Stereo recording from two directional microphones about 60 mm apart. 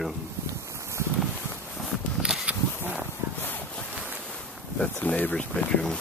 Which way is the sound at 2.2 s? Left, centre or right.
Centre.